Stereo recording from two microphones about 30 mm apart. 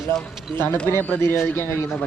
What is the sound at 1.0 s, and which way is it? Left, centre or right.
Speech, left.